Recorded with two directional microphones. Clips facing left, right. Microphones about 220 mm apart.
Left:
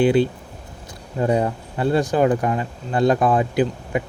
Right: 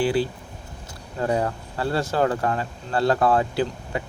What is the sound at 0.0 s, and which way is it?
Speech, 20° left (ahead or behind).